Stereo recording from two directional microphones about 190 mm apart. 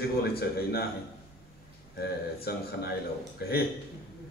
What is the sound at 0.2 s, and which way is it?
Speech, 55° left (ahead or behind).